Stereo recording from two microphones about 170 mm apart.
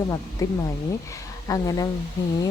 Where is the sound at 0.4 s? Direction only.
15° left (ahead or behind).